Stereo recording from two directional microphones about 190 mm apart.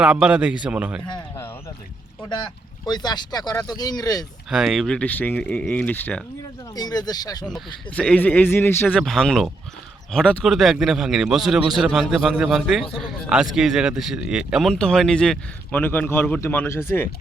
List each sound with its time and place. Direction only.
0.0 s a man's voice: 5° right (ahead or behind)
1.0 s speech: 20° left (ahead or behind)
4.4 s speech: 5° right (ahead or behind)
6.7 s speech: 20° left (ahead or behind)
7.5 s a man's voice: 5° left (ahead or behind)